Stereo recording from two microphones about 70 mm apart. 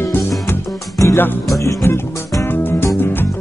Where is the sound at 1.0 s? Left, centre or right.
Left.